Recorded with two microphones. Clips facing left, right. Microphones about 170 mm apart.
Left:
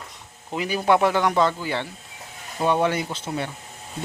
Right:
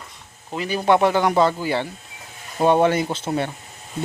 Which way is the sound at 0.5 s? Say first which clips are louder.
Right 2 dB; 10° left (ahead or behind).